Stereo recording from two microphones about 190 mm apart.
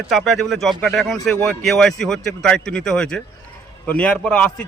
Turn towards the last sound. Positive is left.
turn(degrees=5)  # may be behind; listen again after turning